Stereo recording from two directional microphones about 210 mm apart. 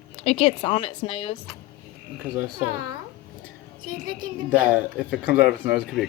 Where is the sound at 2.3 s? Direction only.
15° right (ahead or behind).